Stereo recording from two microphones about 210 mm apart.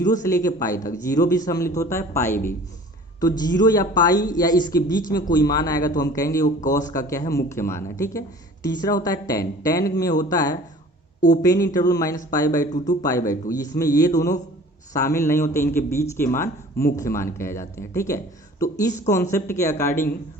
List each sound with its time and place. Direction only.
0.0 s a man's voice: 15° left (ahead or behind)
12.7 s speech: 35° left (ahead or behind)
13.0 s a man's voice: 15° left (ahead or behind)